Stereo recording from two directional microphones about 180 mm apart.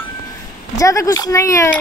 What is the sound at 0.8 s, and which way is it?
Speech, 20° left (ahead or behind).